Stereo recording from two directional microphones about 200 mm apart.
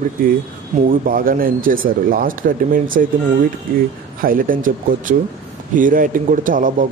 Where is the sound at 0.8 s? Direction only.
45° right (ahead or behind).